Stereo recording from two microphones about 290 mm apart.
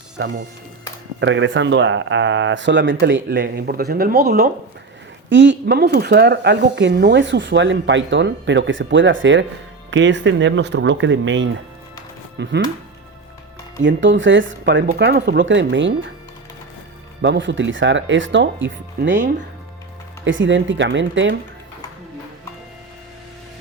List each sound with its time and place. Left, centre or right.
1.2 s speech: right
13.8 s speech: right
17.2 s speech: right
20.2 s speech: right